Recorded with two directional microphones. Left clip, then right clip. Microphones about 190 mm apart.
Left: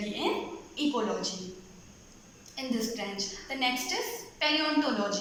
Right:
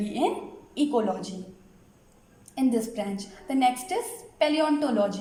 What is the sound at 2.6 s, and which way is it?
Speech, 60° right (ahead or behind).